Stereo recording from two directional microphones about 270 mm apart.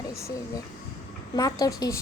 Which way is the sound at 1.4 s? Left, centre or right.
Centre.